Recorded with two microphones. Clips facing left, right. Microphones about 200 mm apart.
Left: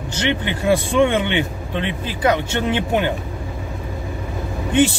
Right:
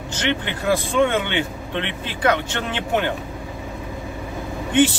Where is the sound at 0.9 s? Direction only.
15° left (ahead or behind).